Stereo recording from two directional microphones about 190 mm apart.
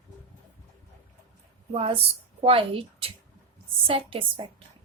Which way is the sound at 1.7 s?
30° right (ahead or behind).